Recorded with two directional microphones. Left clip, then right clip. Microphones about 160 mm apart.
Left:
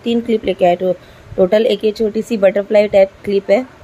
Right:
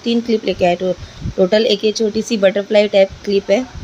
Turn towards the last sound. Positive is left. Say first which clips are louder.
# left 1 dB
turn(degrees=0)  # may be behind; listen again after turning